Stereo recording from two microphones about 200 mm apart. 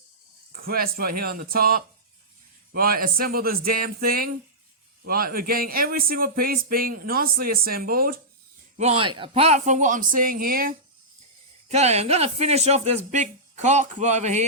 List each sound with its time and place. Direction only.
0.5 s a man's voice: 45° right (ahead or behind)
8.8 s speech: 30° right (ahead or behind); by 10.8 s 45° right (ahead or behind)
11.7 s speech: 35° right (ahead or behind)